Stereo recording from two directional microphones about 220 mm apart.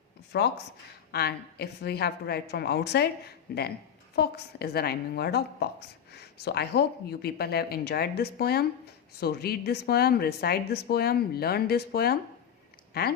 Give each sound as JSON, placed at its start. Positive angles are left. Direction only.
{"t": 0.3, "sound": "a woman's voice", "side_deg": 50}